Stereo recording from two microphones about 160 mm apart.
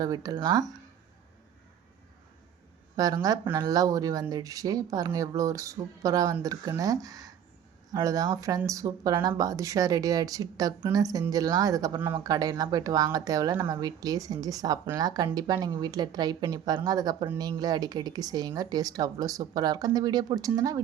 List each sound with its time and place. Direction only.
0.0 s speech: 25° right (ahead or behind)
2.9 s speech: 25° right (ahead or behind)
12.2 s speech: 25° right (ahead or behind)